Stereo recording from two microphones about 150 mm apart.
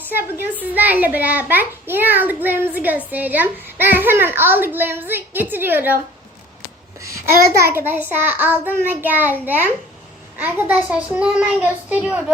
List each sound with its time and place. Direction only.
0.0 s a woman's voice: 15° right (ahead or behind)
7.0 s a child's voice: 20° right (ahead or behind)